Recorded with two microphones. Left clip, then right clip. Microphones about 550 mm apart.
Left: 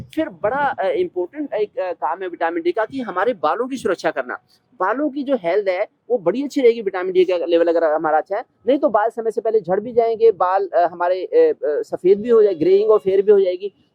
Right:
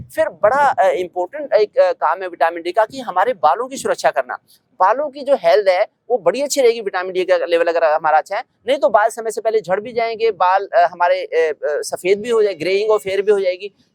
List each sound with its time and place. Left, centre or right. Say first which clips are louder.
0.2 s speech: right 6 dB; right